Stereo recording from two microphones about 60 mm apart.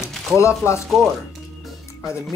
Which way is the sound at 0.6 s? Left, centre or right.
Left.